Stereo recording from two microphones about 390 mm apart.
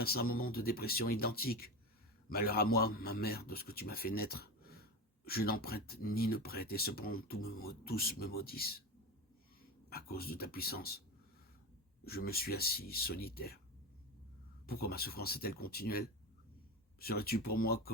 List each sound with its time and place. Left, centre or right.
0.0 s a man's voice: left
12.0 s a man's voice: left
14.7 s a man's voice: left